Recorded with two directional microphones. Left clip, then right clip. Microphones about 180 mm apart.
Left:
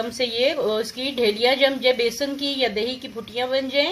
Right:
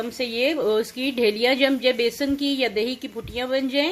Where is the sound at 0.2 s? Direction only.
35° right (ahead or behind).